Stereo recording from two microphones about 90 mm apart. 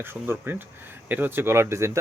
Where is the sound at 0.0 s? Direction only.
25° right (ahead or behind).